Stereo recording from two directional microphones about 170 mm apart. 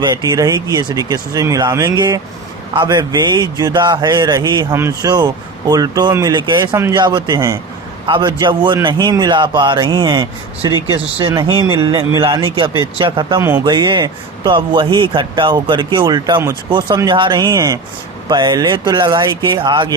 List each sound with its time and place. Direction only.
0.0 s a man's voice: 25° right (ahead or behind)